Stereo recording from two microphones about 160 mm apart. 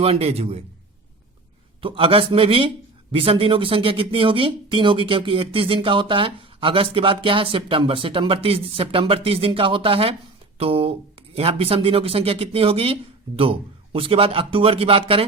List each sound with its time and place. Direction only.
0.0 s a man's voice: 40° right (ahead or behind)
1.8 s a man's voice: 35° right (ahead or behind)